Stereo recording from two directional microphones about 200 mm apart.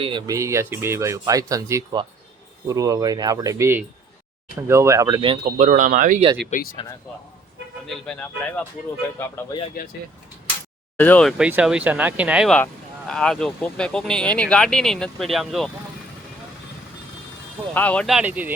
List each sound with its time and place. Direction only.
0.0 s speech: 25° right (ahead or behind)
5.5 s speech: 35° right (ahead or behind)
6.5 s speech: 40° left (ahead or behind)
7.9 s speech: 5° left (ahead or behind)
10.9 s speech: 10° left (ahead or behind)
17.7 s speech: 5° left (ahead or behind)